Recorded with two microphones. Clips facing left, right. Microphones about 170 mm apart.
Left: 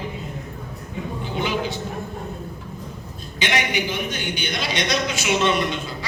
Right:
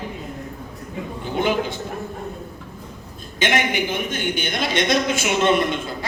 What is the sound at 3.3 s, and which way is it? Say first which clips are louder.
A man's voice: right 3 dB; 50° right (ahead or behind).